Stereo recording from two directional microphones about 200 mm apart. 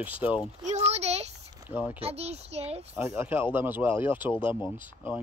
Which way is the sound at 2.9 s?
10° right (ahead or behind).